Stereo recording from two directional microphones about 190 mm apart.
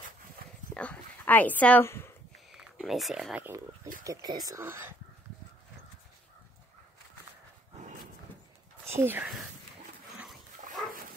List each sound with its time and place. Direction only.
0.7 s a sound: 10° left (ahead or behind)
2.5 s speech: centre (ahead or behind)
8.8 s speech: 10° right (ahead or behind)